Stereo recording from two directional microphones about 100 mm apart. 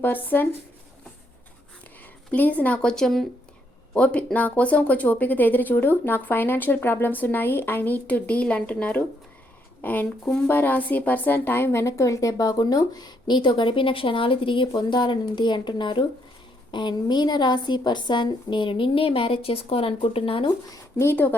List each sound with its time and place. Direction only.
0.0 s speech: 20° left (ahead or behind)
2.3 s a woman's voice: 15° left (ahead or behind); by 20.5 s 65° left (ahead or behind)
21.0 s speech: 20° left (ahead or behind)